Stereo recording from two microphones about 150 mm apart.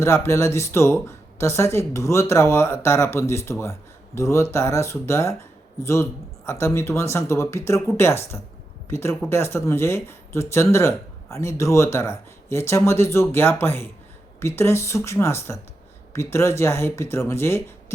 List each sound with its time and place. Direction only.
0.0 s speech: 15° left (ahead or behind)